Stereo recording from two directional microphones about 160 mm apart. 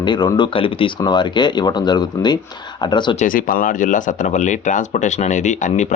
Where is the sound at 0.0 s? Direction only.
25° left (ahead or behind).